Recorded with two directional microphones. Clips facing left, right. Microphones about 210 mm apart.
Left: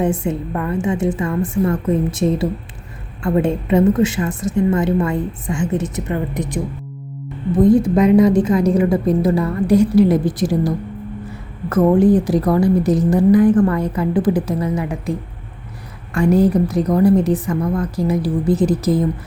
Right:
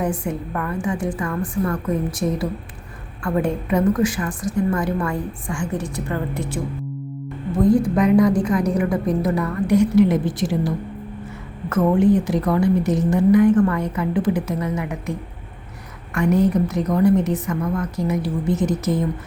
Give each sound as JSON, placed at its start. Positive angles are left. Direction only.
{"t": 0.0, "sound": "a woman's voice", "side_deg": 25}
{"t": 7.6, "sound": "a woman's voice", "side_deg": 20}
{"t": 11.7, "sound": "a woman's voice", "side_deg": 35}
{"t": 16.1, "sound": "a woman's voice", "side_deg": 30}